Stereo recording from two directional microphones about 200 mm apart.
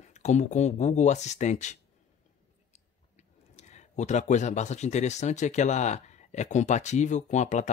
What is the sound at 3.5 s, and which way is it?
Speech, 35° left (ahead or behind).